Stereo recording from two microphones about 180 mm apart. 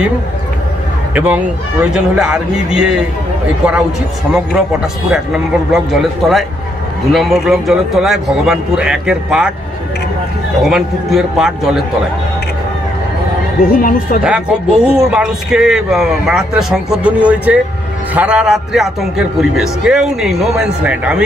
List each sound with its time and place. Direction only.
1.1 s a man's voice: 10° right (ahead or behind)
5.1 s a man's voice: centre (ahead or behind)
10.6 s a man's voice: centre (ahead or behind)
13.6 s speech: 50° left (ahead or behind)
14.2 s a man's voice: 5° right (ahead or behind)